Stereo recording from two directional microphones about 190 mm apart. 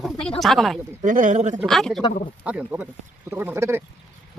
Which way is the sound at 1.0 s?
40° right (ahead or behind).